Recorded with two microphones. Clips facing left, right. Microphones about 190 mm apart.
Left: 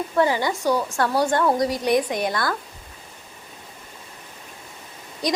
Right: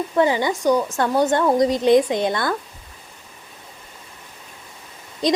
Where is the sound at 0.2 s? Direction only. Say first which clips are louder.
Right 2 dB; 20° right (ahead or behind).